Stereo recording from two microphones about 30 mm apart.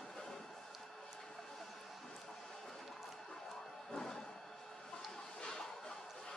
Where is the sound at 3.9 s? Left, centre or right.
Centre.